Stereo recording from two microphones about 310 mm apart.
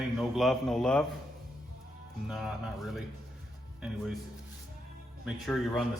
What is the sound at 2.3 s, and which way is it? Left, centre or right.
Speech, centre.